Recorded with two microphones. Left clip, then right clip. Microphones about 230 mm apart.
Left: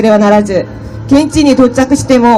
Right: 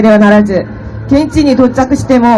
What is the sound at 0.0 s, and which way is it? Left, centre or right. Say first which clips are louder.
A woman's voice: right 1 dB; left.